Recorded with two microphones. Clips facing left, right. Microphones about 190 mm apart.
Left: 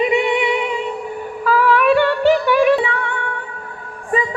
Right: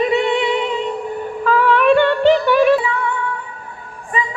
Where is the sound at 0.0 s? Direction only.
15° left (ahead or behind).